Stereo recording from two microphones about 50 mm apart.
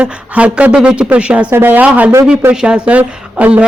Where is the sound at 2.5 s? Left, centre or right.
Centre.